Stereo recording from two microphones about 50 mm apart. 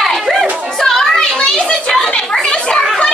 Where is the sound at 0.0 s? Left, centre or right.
Centre.